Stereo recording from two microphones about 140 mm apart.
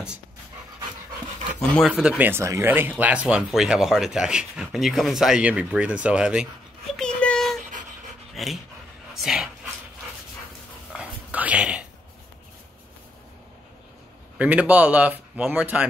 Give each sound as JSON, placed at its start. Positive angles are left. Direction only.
{"t": 1.6, "sound": "speech", "side_deg": 0}
{"t": 6.9, "sound": "a sound", "side_deg": 5}
{"t": 8.4, "sound": "speech", "side_deg": 0}
{"t": 10.9, "sound": "dog", "side_deg": -10}
{"t": 14.4, "sound": "speech", "side_deg": -10}